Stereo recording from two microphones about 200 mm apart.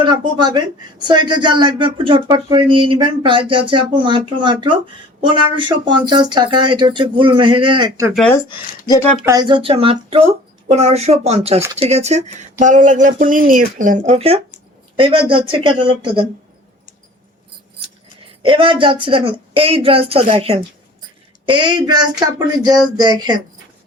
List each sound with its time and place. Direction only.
0.0 s speech: 20° right (ahead or behind)
8.1 s speech: 5° left (ahead or behind)
8.4 s speech: 20° left (ahead or behind)
9.2 s speech: 20° right (ahead or behind)
18.4 s speech: 25° right (ahead or behind)